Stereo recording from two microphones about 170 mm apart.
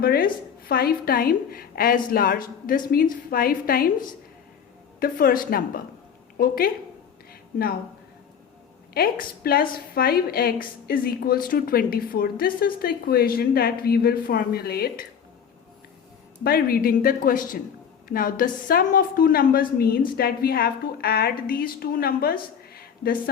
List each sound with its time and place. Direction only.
0.0 s a woman's voice: 60° left (ahead or behind)
4.9 s a woman's voice: 60° left (ahead or behind)
8.9 s a woman's voice: 65° left (ahead or behind)
16.4 s a woman's voice: 60° left (ahead or behind)